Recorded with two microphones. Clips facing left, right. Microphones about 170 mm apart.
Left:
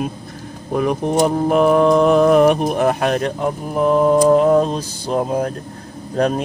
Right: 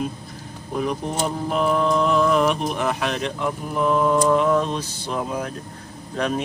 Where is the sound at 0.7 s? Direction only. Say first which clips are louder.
Left 8 dB; 55° left (ahead or behind).